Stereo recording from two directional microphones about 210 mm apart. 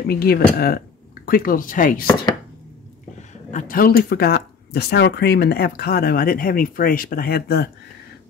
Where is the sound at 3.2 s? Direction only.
35° left (ahead or behind).